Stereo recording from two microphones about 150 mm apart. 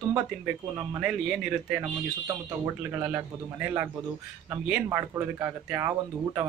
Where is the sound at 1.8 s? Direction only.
20° right (ahead or behind).